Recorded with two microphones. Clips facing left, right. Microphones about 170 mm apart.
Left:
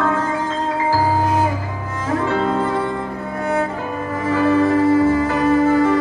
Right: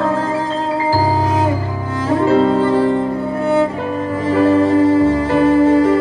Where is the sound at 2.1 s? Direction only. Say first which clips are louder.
Right 6 dB; 30° right (ahead or behind).